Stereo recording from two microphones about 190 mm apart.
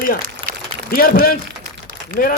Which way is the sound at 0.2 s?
50° right (ahead or behind).